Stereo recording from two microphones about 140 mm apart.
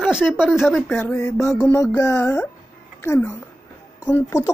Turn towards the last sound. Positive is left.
turn(degrees=20)  # may be behind; listen again after turning